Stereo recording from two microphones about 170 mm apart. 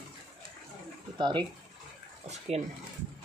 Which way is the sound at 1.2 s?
25° right (ahead or behind).